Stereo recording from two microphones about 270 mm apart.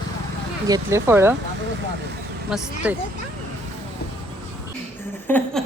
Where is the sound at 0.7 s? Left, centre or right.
Centre.